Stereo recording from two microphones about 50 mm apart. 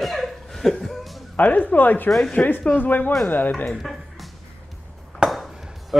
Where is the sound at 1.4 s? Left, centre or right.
Left.